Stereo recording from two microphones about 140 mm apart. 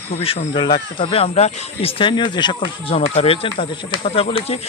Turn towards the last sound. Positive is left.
turn(degrees=45)  # may be behind; listen again after turning